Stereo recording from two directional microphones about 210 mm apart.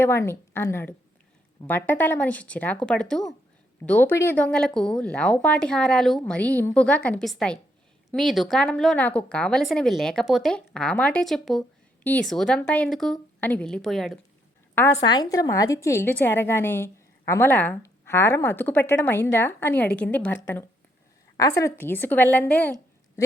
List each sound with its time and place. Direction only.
0.0 s a woman's voice: 10° left (ahead or behind)
15.0 s a woman's voice: 20° left (ahead or behind)